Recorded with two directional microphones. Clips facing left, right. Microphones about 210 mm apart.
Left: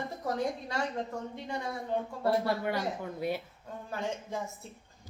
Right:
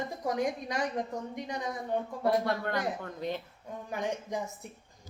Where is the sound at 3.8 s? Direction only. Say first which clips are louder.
Right 2 dB; 15° right (ahead or behind).